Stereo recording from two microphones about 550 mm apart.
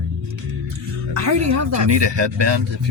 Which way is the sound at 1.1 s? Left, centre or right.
Right.